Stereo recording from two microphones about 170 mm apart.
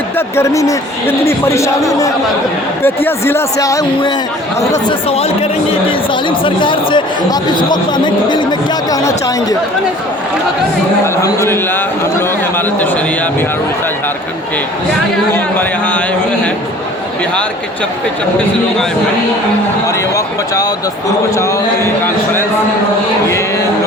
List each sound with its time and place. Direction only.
0.3 s speech: 20° left (ahead or behind)
4.9 s speech: 35° left (ahead or behind); by 9.6 s 20° left (ahead or behind)
11.0 s speech: 15° left (ahead or behind)
15.3 s speech: 10° left (ahead or behind)
19.9 s speech: 20° left (ahead or behind)